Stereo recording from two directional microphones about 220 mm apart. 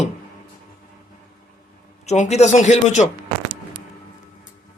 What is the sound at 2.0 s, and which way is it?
Speech, 30° left (ahead or behind).